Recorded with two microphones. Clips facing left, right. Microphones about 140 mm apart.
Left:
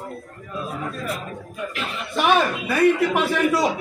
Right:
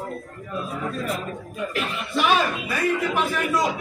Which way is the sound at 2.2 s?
65° left (ahead or behind).